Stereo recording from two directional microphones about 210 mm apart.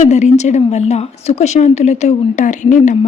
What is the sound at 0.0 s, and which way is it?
Speech, 35° left (ahead or behind).